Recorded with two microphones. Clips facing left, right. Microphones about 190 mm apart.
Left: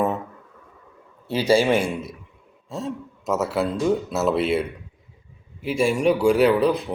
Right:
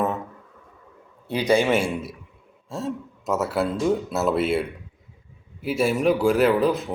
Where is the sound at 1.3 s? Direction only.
5° left (ahead or behind).